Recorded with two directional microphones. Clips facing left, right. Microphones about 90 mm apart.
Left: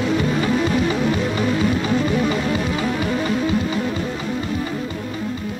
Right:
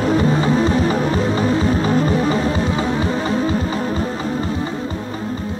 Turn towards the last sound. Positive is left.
turn(degrees=-35)  # may be behind; listen again after turning